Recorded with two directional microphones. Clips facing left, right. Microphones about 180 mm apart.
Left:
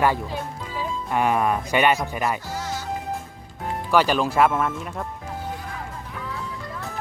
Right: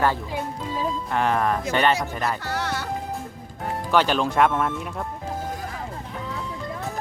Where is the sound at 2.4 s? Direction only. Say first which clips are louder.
Right 2 dB; 70° right (ahead or behind).